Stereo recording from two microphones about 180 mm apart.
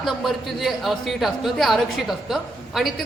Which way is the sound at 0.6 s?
Centre (ahead or behind).